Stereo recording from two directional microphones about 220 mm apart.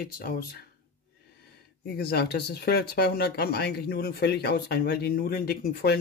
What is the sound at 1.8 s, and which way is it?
Speech, 45° left (ahead or behind).